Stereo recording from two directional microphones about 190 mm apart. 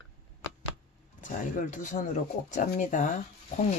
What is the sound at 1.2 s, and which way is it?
Speech, 45° left (ahead or behind).